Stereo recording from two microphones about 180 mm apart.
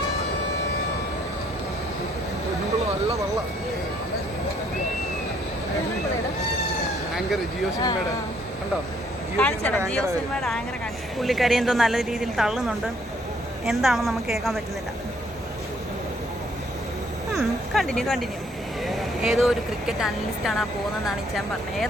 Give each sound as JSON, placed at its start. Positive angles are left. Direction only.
{"t": 7.7, "sound": "speech", "side_deg": 20}
{"t": 9.4, "sound": "speech", "side_deg": 10}
{"t": 11.2, "sound": "speech", "side_deg": 0}
{"t": 17.3, "sound": "speech", "side_deg": 0}